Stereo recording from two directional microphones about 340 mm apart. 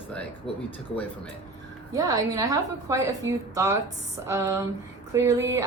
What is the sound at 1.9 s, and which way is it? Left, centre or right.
A woman's voice, centre.